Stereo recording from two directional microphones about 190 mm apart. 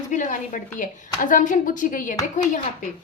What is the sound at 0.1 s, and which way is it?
A woman's voice, 40° left (ahead or behind).